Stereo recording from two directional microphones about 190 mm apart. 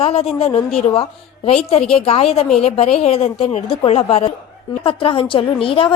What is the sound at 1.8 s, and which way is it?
Speech, 5° left (ahead or behind).